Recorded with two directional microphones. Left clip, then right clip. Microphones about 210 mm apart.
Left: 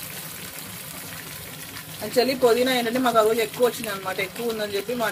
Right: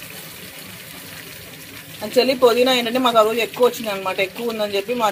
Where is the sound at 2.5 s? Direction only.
15° right (ahead or behind).